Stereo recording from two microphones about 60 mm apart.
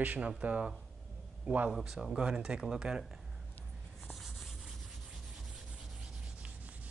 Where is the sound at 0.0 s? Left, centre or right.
Right.